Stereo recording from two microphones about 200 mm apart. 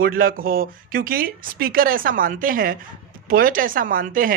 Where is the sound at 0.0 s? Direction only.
45° right (ahead or behind).